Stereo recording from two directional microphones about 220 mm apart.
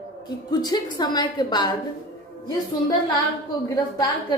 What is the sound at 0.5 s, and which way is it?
A woman's voice, 20° left (ahead or behind).